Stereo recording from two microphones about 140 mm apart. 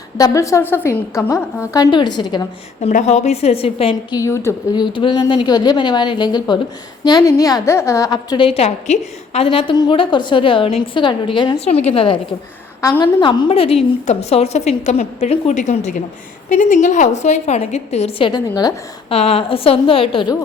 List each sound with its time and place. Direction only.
0.2 s a woman's voice: 25° left (ahead or behind)
2.8 s a woman's voice: 50° left (ahead or behind)
4.1 s a woman's voice: 20° left (ahead or behind)
4.8 s a woman's voice: 35° left (ahead or behind)
8.4 s a woman's voice: 50° left (ahead or behind)
11.6 s a woman's voice: 50° left (ahead or behind)
18.3 s a woman's voice: 30° left (ahead or behind)
19.0 s a woman's voice: 45° left (ahead or behind)